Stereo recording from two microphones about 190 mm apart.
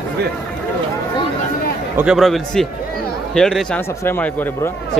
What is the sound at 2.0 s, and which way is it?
A man's voice, centre (ahead or behind).